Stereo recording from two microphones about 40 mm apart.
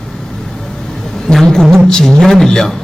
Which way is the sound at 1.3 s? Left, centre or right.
Centre.